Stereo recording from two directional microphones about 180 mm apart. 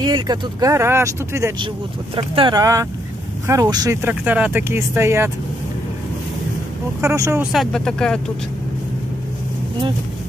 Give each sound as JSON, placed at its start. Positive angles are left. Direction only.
{"t": 0.0, "sound": "speech", "side_deg": -25}
{"t": 7.0, "sound": "speech", "side_deg": -15}
{"t": 7.5, "sound": "speech", "side_deg": 5}